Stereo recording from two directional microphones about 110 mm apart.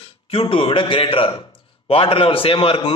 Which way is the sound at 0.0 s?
55° left (ahead or behind).